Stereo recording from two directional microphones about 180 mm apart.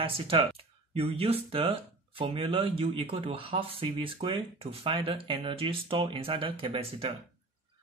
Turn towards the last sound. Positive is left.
turn(degrees=-30)  # may be behind; listen again after turning